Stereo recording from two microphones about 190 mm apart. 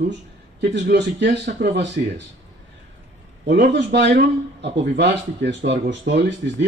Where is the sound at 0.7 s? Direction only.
65° right (ahead or behind).